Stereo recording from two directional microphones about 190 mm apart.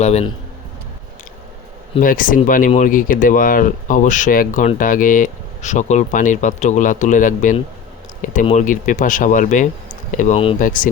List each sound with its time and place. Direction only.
0.0 s speech: 35° left (ahead or behind)
2.0 s speech: 45° left (ahead or behind); by 10.6 s 30° left (ahead or behind)
10.6 s speech: 45° left (ahead or behind)